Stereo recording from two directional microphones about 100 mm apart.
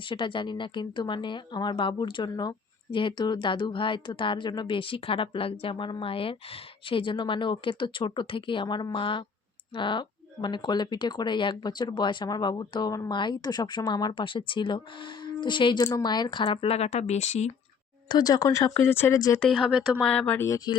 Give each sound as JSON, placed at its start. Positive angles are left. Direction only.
{"t": 0.1, "sound": "speech", "side_deg": 55}
{"t": 2.9, "sound": "speech", "side_deg": 55}
{"t": 18.1, "sound": "speech", "side_deg": 40}
{"t": 18.8, "sound": "speech", "side_deg": 25}
{"t": 19.5, "sound": "speech", "side_deg": 0}
{"t": 20.0, "sound": "speech", "side_deg": 15}